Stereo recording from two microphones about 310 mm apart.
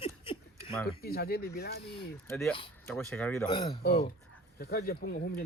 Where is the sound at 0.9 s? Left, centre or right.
Left.